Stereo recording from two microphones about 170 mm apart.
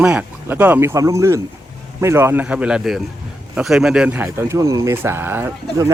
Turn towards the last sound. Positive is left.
turn(degrees=-15)  # may be behind; listen again after turning